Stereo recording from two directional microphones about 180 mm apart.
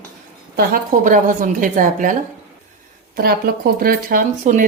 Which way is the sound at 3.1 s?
55° right (ahead or behind).